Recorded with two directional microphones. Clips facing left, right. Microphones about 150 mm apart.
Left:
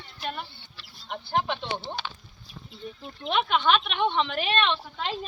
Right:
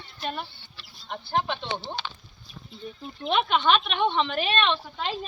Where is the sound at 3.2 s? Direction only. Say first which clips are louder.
Right 1 dB; 15° right (ahead or behind).